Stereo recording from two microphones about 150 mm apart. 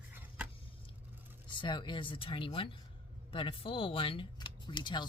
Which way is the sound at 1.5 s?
30° left (ahead or behind).